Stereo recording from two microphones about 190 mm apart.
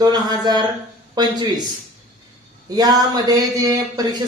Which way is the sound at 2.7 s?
20° right (ahead or behind).